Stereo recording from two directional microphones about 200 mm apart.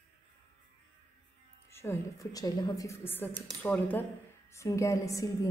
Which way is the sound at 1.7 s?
15° left (ahead or behind).